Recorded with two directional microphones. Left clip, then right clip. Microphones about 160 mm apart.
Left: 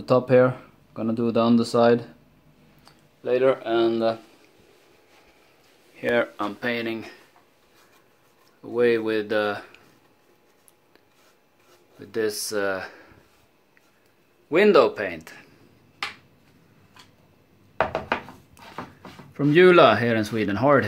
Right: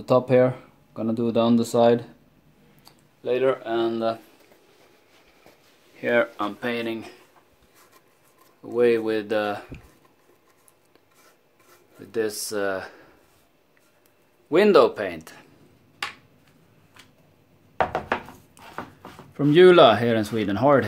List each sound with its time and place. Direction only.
0.0 s speech: 5° right (ahead or behind)
2.8 s a sound: 5° right (ahead or behind)
3.6 s speech: 20° left (ahead or behind)
5.9 s speech: 10° right (ahead or behind)
8.6 s speech: 10° right (ahead or behind)
12.0 s speech: 5° right (ahead or behind)
14.5 s speech: 20° right (ahead or behind)
19.4 s speech: 10° right (ahead or behind)